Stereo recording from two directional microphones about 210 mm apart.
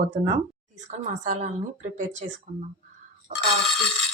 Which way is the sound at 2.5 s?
40° right (ahead or behind).